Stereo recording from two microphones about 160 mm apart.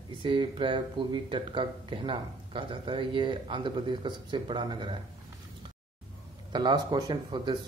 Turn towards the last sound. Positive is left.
turn(degrees=-30)  # may be behind; listen again after turning